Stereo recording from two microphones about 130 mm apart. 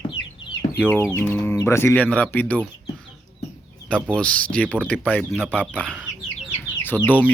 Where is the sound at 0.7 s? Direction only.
15° left (ahead or behind).